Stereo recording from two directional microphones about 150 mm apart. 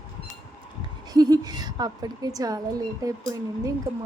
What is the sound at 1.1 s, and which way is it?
A woman's voice, 25° right (ahead or behind).